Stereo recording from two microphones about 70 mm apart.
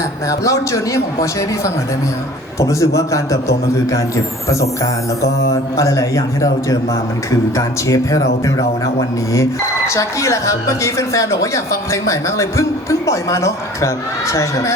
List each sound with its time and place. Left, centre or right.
0.3 s speech: left
5.7 s speech: left